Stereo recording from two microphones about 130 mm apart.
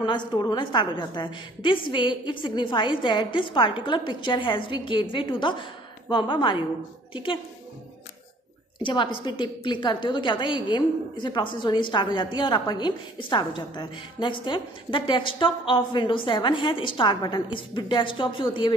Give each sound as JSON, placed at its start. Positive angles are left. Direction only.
{"t": 0.0, "sound": "a woman's voice", "side_deg": 35}
{"t": 8.8, "sound": "a woman's voice", "side_deg": 40}